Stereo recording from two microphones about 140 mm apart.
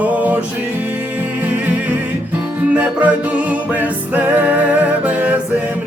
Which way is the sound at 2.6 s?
10° right (ahead or behind).